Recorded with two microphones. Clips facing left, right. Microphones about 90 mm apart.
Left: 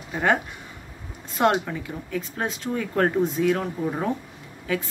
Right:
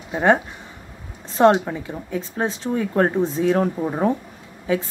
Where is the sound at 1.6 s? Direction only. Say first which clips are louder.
Right 3 dB; 25° right (ahead or behind).